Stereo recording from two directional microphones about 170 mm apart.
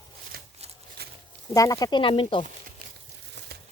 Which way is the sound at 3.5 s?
65° right (ahead or behind).